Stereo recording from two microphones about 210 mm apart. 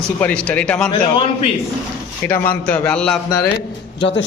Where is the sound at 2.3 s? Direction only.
5° left (ahead or behind).